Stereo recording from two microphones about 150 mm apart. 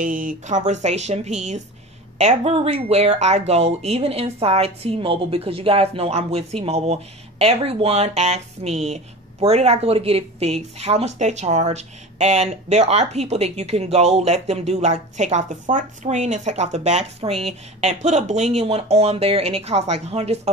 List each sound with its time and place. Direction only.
0.0 s speech: 65° right (ahead or behind); by 20.5 s 45° right (ahead or behind)